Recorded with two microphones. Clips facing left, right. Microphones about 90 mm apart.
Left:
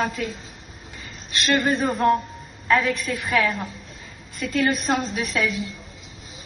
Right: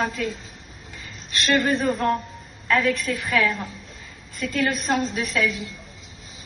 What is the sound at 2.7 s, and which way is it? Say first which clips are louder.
Speech: even; 15° left (ahead or behind).